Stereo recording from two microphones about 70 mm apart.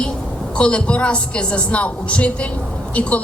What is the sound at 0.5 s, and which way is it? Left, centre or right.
A woman's voice, centre.